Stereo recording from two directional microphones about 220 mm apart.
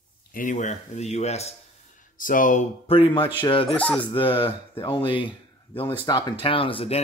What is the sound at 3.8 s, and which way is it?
Speech, 5° left (ahead or behind).